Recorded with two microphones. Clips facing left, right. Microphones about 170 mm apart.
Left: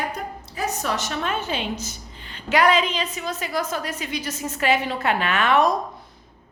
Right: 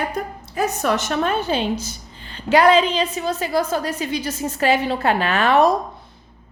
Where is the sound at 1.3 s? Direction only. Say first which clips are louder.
Right 4 dB; 35° right (ahead or behind).